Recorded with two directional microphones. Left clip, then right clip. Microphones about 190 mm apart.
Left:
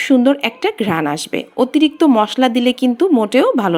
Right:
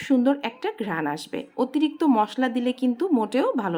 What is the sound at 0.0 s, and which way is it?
Speech, 15° left (ahead or behind).